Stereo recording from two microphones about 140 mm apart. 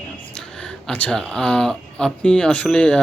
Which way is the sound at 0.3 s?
5° left (ahead or behind).